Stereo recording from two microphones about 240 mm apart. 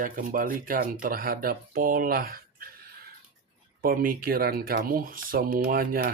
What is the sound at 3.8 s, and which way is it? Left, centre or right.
Speech, right.